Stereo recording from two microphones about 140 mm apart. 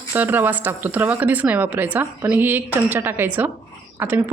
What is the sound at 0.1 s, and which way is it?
A woman's voice, 15° right (ahead or behind).